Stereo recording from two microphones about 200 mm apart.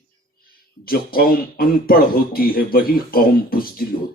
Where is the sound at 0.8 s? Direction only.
45° left (ahead or behind).